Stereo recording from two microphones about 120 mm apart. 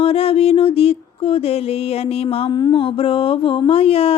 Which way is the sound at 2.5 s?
35° left (ahead or behind).